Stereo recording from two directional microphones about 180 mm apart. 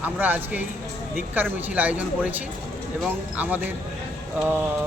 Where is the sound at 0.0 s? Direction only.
10° right (ahead or behind).